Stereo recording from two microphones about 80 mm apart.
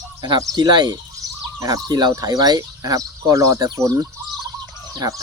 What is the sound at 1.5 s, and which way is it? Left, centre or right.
Speech, right.